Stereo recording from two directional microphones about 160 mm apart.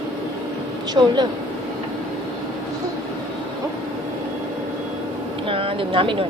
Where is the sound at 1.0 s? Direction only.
20° right (ahead or behind).